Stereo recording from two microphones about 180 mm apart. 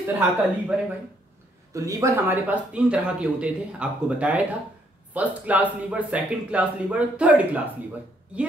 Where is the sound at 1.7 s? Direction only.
20° right (ahead or behind).